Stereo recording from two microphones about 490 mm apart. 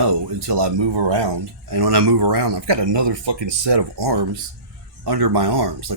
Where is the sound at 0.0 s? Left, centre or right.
Right.